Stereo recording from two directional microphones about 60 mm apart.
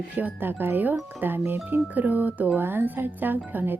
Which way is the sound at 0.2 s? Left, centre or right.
Right.